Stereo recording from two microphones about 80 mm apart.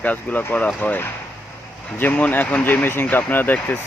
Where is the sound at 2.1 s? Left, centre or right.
Left.